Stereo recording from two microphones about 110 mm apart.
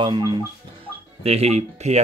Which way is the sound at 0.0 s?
45° right (ahead or behind).